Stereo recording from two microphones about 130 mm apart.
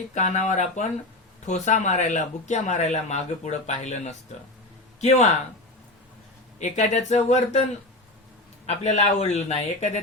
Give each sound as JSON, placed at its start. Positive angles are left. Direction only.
{"t": 0.1, "sound": "speech", "side_deg": 70}
{"t": 6.6, "sound": "speech", "side_deg": 65}